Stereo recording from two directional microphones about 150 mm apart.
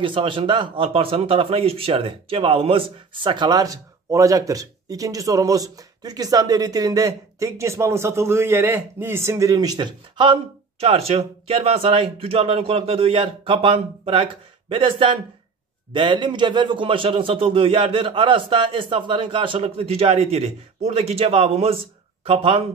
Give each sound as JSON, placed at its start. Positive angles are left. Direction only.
{"t": 0.0, "sound": "speech", "side_deg": -35}